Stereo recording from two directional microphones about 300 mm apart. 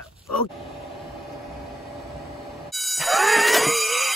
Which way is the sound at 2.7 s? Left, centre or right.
Centre.